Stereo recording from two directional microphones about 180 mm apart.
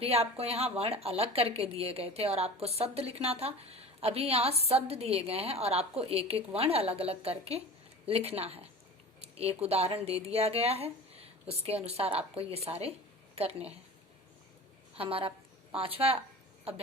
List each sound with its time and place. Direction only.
0.0 s speech: 35° right (ahead or behind)
14.9 s speech: 30° right (ahead or behind)